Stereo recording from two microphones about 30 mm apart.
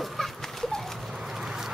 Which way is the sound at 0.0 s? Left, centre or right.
Centre.